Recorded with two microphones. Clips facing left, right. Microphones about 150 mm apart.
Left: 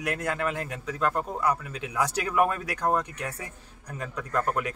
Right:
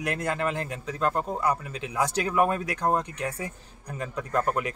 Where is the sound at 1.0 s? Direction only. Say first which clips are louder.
Right 1 dB; 30° right (ahead or behind).